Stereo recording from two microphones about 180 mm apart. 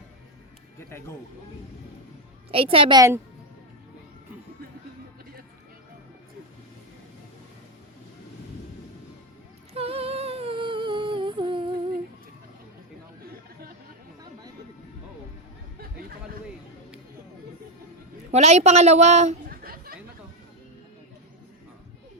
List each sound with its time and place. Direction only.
0.9 s speech: 15° left (ahead or behind)
2.5 s a woman's voice: 30° right (ahead or behind)
9.7 s humming: 35° right (ahead or behind)
18.3 s a woman's voice: 40° right (ahead or behind)
19.5 s chatter: 55° right (ahead or behind)